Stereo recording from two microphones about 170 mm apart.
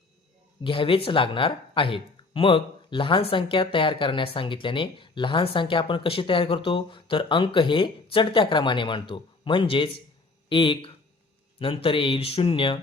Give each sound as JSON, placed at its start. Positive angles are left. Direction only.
{"t": 0.6, "sound": "speech", "side_deg": 30}